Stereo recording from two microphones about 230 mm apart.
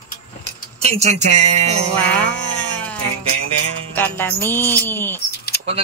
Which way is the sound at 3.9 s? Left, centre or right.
Centre.